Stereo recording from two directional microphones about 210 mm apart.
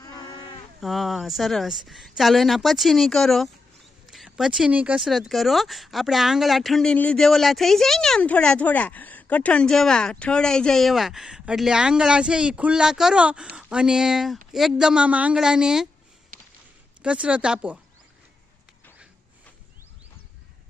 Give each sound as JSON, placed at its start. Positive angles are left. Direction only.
{"t": 0.0, "sound": "livestock", "side_deg": 20}
{"t": 0.8, "sound": "speech", "side_deg": 0}
{"t": 16.3, "sound": "a sound", "side_deg": -40}
{"t": 17.0, "sound": "speech", "side_deg": -5}